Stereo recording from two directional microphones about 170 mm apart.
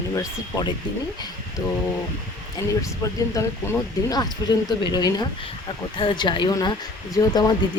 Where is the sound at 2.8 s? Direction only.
20° left (ahead or behind).